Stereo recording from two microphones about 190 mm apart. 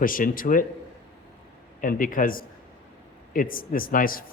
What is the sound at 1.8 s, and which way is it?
Speech, 45° left (ahead or behind).